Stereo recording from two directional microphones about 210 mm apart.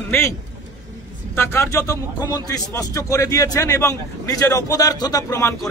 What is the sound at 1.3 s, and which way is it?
A man's voice, 10° left (ahead or behind).